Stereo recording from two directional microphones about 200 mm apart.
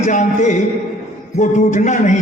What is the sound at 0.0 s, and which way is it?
A man's voice, 35° left (ahead or behind).